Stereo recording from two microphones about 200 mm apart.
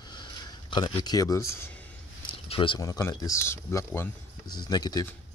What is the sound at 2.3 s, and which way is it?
Speech, 30° left (ahead or behind).